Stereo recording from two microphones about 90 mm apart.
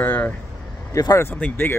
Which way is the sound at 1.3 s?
20° left (ahead or behind).